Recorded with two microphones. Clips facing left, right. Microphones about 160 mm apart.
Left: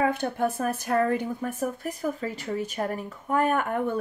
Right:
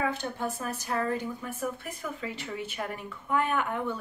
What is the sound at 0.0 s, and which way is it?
Speech, 55° left (ahead or behind).